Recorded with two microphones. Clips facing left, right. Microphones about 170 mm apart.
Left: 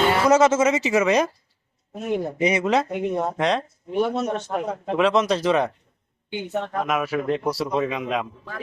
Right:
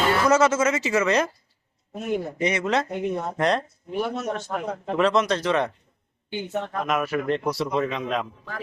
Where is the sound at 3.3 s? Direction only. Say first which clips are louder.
Right 3 dB; centre (ahead or behind).